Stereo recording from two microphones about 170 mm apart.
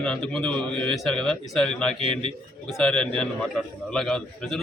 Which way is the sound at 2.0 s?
30° right (ahead or behind).